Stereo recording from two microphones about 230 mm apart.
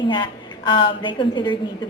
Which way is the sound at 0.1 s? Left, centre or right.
Centre.